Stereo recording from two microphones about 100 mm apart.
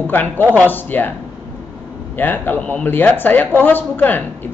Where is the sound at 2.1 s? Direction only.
20° left (ahead or behind).